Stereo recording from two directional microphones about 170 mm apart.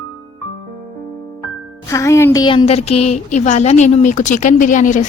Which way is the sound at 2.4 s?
30° left (ahead or behind).